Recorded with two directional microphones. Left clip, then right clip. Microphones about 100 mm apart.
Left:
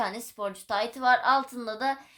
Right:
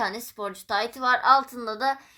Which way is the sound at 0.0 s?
90° right.